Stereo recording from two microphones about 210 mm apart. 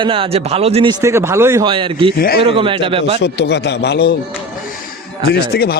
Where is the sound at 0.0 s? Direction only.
25° right (ahead or behind).